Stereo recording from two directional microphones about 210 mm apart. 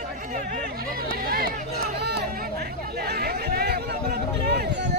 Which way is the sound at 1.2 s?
45° right (ahead or behind).